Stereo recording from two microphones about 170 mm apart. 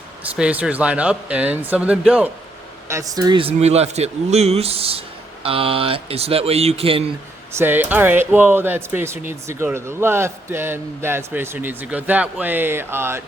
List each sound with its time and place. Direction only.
0.3 s speech: 5° right (ahead or behind)
2.9 s speech: 20° right (ahead or behind)
7.6 s speech: 10° right (ahead or behind)